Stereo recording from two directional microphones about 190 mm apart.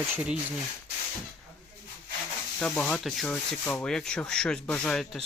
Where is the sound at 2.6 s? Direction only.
5° left (ahead or behind).